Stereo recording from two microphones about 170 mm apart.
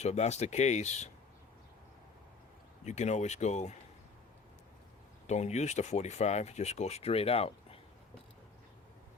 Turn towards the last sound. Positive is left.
turn(degrees=35)  # may be behind; listen again after turning